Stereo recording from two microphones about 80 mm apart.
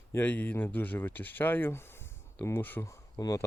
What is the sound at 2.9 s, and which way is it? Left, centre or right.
Speech, left.